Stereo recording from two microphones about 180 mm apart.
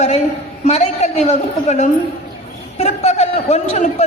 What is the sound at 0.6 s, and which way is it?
A woman's voice, 40° left (ahead or behind).